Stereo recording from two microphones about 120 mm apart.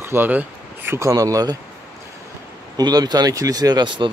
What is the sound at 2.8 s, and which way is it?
Speech, 35° right (ahead or behind).